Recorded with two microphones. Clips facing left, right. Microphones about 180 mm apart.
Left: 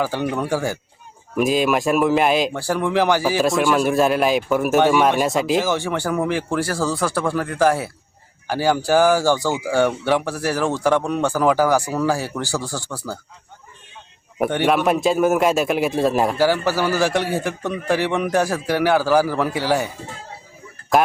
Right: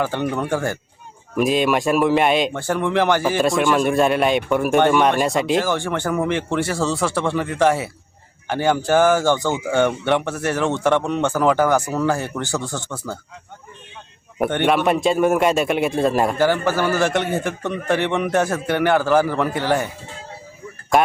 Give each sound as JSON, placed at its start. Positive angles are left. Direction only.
{"t": 0.0, "sound": "a man's voice", "side_deg": 10}
{"t": 9.4, "sound": "speech", "side_deg": -20}
{"t": 9.6, "sound": "a man's voice", "side_deg": 5}
{"t": 10.6, "sound": "speech", "side_deg": -20}
{"t": 10.8, "sound": "a man's voice", "side_deg": 5}
{"t": 14.3, "sound": "a man's voice", "side_deg": 5}
{"t": 20.9, "sound": "a man's voice", "side_deg": 0}